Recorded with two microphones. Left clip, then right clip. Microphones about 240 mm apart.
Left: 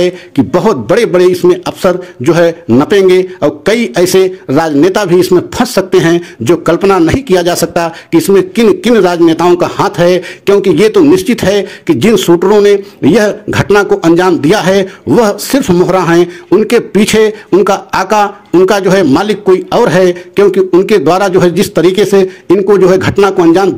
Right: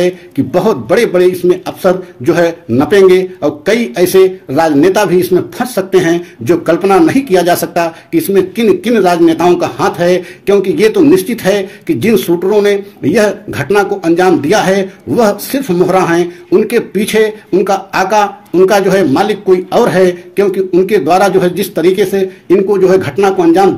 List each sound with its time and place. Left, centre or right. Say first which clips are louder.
0.0 s a man's voice: left 2 dB; left